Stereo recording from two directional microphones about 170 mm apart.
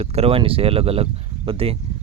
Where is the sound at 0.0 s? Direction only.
35° right (ahead or behind).